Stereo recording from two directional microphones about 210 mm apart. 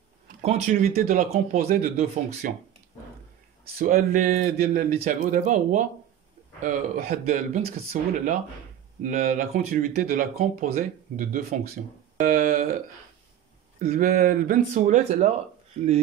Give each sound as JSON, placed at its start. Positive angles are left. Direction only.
{"t": 0.4, "sound": "speech", "side_deg": -30}
{"t": 0.7, "sound": "speech", "side_deg": -40}
{"t": 3.7, "sound": "speech", "side_deg": -40}